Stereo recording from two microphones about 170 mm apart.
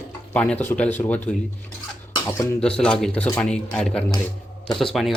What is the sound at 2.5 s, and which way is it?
Speech, 5° left (ahead or behind).